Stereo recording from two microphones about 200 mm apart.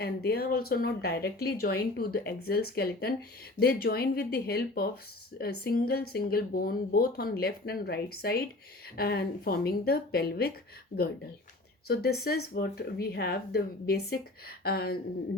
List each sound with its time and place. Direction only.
0.0 s speech: 50° left (ahead or behind)
12.2 s speech: 50° left (ahead or behind)